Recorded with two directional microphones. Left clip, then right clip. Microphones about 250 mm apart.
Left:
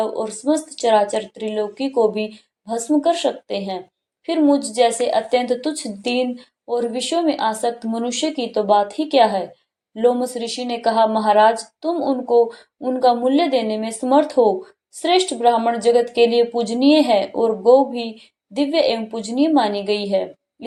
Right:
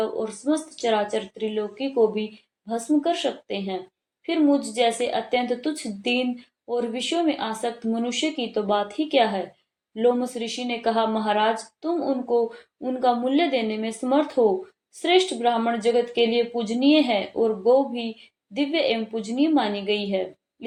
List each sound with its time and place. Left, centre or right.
0.0 s speech: centre